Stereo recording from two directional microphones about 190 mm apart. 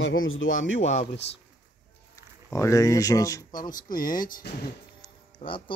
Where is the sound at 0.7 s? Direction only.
35° left (ahead or behind).